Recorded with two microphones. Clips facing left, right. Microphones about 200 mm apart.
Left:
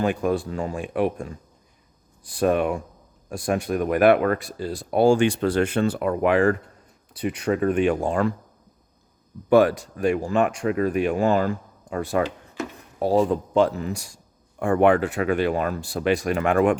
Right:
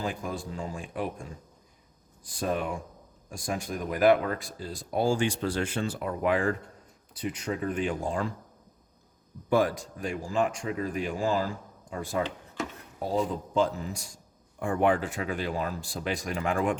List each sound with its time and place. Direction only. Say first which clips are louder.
0.0 s speech: left 11 dB; 70° left (ahead or behind)
9.5 s speech: left 8 dB; 70° left (ahead or behind)